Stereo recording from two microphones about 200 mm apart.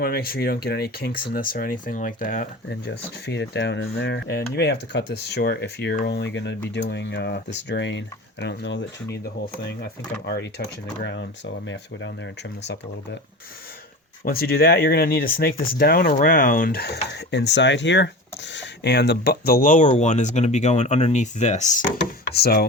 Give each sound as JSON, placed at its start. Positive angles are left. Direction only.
{"t": 0.0, "sound": "speech", "side_deg": 50}
{"t": 2.6, "sound": "speech", "side_deg": 55}
{"t": 10.2, "sound": "speech", "side_deg": 50}
{"t": 14.3, "sound": "speech", "side_deg": 50}
{"t": 21.9, "sound": "speech", "side_deg": 50}